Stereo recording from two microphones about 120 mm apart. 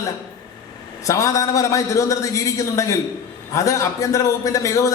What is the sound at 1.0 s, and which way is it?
A man's voice, 25° left (ahead or behind).